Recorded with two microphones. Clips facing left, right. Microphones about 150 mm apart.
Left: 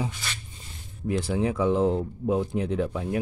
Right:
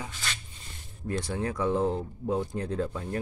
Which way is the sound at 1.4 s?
10° left (ahead or behind).